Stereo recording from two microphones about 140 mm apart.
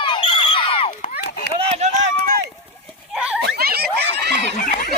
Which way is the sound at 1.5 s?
45° right (ahead or behind).